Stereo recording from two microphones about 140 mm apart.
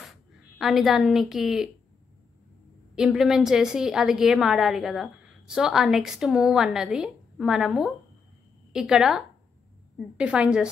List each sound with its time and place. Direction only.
0.0 s a woman's voice: centre (ahead or behind)
3.0 s a woman's voice: 5° right (ahead or behind)